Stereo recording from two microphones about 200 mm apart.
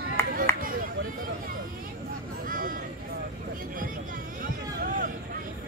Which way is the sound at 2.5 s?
45° right (ahead or behind).